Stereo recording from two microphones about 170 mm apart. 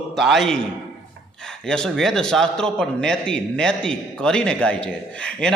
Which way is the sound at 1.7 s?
5° left (ahead or behind).